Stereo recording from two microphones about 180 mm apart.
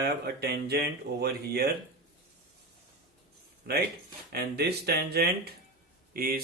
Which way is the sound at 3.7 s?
60° right (ahead or behind).